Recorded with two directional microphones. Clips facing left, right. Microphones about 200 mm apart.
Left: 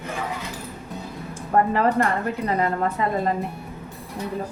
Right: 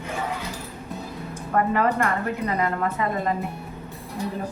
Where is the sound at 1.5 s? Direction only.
35° left (ahead or behind).